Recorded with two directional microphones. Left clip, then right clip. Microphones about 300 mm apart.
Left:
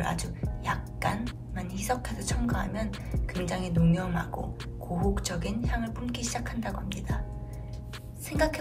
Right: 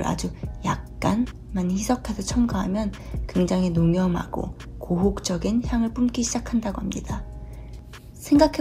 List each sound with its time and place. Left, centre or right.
0.0 s music: centre
1.5 s a woman's voice: centre
8.3 s a woman's voice: centre